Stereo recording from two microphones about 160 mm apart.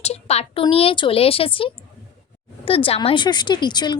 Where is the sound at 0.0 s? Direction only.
40° left (ahead or behind).